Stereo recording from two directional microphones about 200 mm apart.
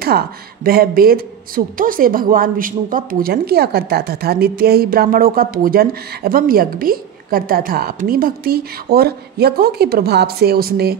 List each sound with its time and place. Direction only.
0.7 s speech: 50° right (ahead or behind)